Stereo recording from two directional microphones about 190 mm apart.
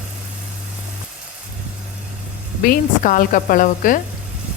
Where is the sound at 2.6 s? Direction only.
45° left (ahead or behind).